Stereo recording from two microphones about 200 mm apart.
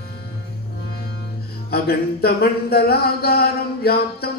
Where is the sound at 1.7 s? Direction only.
50° left (ahead or behind).